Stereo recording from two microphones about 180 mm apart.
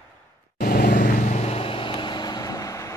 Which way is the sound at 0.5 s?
55° left (ahead or behind).